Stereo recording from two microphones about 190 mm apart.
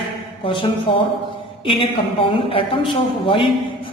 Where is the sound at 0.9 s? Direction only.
30° left (ahead or behind).